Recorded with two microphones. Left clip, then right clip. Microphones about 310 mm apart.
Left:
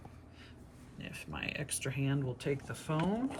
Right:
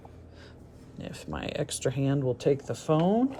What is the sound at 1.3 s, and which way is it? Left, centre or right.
Speech, centre.